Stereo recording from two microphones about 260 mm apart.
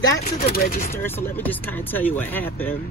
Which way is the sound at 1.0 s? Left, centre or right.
Centre.